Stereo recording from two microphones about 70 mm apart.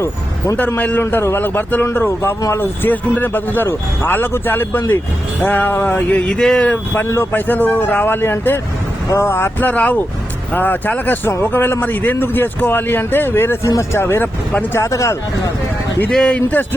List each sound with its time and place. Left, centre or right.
0.8 s speech: left
6.3 s speech: centre
6.9 s speech: left
7.3 s speech: left
13.7 s speech: left
14.5 s speech: left
14.8 s speech: left
16.0 s speech: centre